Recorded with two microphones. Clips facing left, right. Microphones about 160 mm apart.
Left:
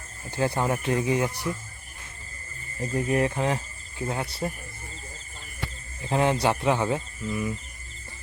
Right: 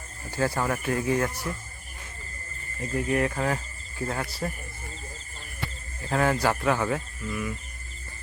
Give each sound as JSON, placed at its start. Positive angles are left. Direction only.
{"t": 0.3, "sound": "speech", "side_deg": 20}
{"t": 2.9, "sound": "speech", "side_deg": 30}
{"t": 6.1, "sound": "speech", "side_deg": 20}